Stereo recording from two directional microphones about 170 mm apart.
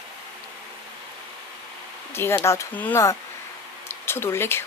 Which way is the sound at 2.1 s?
15° left (ahead or behind).